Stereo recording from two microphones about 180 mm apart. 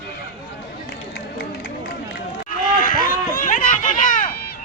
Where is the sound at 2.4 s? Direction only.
50° left (ahead or behind).